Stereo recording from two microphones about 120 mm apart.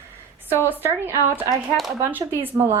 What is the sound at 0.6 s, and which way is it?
Speech, 15° right (ahead or behind).